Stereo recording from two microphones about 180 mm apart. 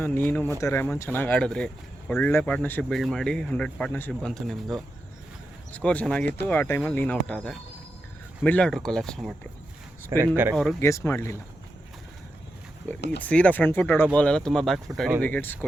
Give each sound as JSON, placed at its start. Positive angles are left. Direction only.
{"t": 0.0, "sound": "speech", "side_deg": 10}
{"t": 10.1, "sound": "speech", "side_deg": -15}
{"t": 10.5, "sound": "speech", "side_deg": 0}
{"t": 10.8, "sound": "speech", "side_deg": 15}
{"t": 13.1, "sound": "speech", "side_deg": 5}